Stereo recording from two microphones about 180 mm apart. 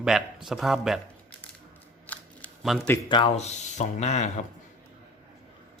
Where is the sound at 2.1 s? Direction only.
5° left (ahead or behind).